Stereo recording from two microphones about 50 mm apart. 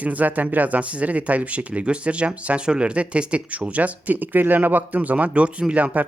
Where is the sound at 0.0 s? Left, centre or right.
Right.